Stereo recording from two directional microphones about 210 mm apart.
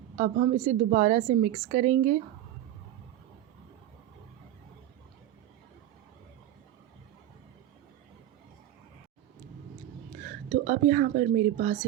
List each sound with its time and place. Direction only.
0.2 s a woman's voice: 30° right (ahead or behind)
10.2 s a woman's voice: 35° right (ahead or behind)